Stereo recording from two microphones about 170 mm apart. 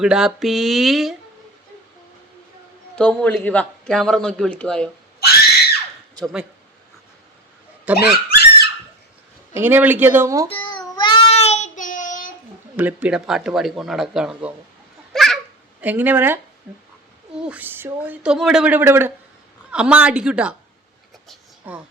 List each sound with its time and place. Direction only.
0.0 s a man's voice: 5° right (ahead or behind)
2.9 s a man's voice: 5° left (ahead or behind)
6.1 s a man's voice: centre (ahead or behind)
7.9 s speech: 10° right (ahead or behind)
8.3 s squeak: 70° left (ahead or behind)
9.6 s speech: 10° right (ahead or behind)
10.5 s babbling: 30° left (ahead or behind)
10.9 s child singing: 30° left (ahead or behind); by 12.3 s 50° left (ahead or behind)
12.7 s a man's voice: 10° right (ahead or behind)
15.1 s a sound: centre (ahead or behind)
15.8 s speech: 10° right (ahead or behind)
21.7 s speech: 10° right (ahead or behind)